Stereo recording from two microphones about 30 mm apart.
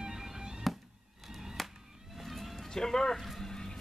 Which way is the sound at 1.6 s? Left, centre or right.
Centre.